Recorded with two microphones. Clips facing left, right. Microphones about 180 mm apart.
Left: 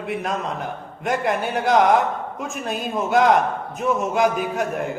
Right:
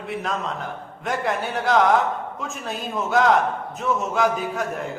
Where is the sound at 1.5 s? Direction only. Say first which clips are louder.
Left 2 dB; 15° left (ahead or behind).